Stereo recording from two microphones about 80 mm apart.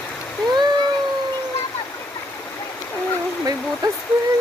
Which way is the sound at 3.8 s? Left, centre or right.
Right.